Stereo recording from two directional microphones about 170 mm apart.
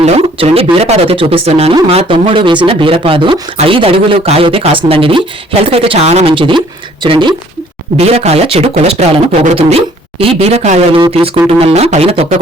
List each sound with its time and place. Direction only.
0.0 s speech: 35° right (ahead or behind)
7.9 s speech: 40° right (ahead or behind)